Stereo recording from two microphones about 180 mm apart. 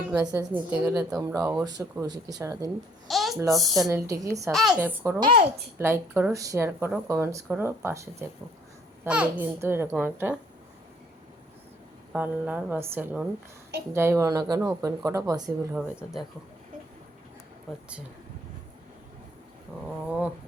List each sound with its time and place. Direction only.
0.1 s a woman's voice: 10° right (ahead or behind)
3.1 s babbling: centre (ahead or behind)
3.5 s speech: centre (ahead or behind)
3.8 s a woman's voice: 15° right (ahead or behind)
4.5 s a woman's voice: 5° right (ahead or behind)
5.2 s speech: 30° right (ahead or behind)
5.7 s a woman's voice: 15° right (ahead or behind)
12.1 s a woman's voice: 10° right (ahead or behind)
20.1 s a woman's voice: 10° right (ahead or behind)